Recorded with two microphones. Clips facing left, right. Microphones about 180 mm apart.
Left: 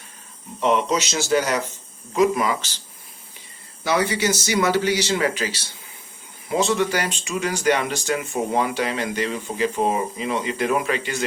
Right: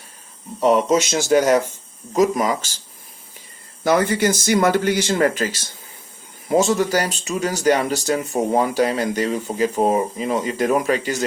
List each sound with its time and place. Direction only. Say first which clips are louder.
0.6 s speech: right 4 dB; 40° right (ahead or behind)
0.9 s speech: right 4 dB; 50° right (ahead or behind)
3.8 s speech: right 4 dB; 50° right (ahead or behind)